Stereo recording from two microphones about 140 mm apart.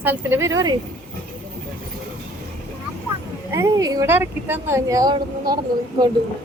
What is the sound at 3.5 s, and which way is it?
Speech, 25° right (ahead or behind).